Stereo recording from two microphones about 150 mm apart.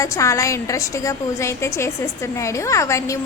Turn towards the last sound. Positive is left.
turn(degrees=20)  # may be behind; listen again after turning